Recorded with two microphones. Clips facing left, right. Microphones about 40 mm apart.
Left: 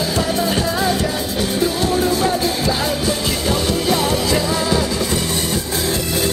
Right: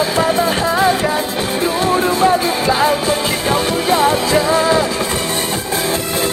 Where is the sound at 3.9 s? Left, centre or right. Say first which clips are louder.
Right 6 dB; right.